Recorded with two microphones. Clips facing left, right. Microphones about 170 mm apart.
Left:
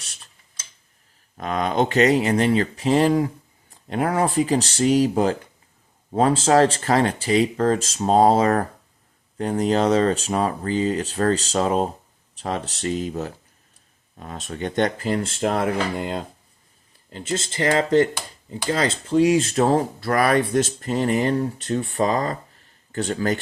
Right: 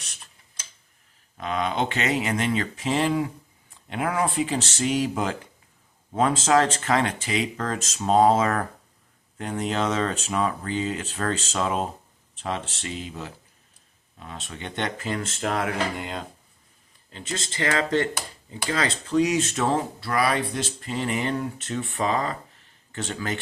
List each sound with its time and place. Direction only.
1.4 s speech: 45° left (ahead or behind)